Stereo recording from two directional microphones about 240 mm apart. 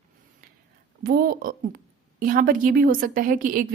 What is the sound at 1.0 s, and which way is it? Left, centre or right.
A woman's voice, right.